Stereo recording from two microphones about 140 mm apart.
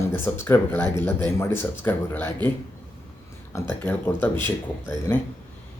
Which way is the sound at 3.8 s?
15° left (ahead or behind).